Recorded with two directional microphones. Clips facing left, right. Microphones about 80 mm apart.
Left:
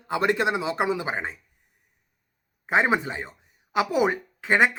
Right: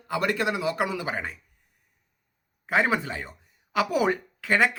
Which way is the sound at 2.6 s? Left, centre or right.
Left.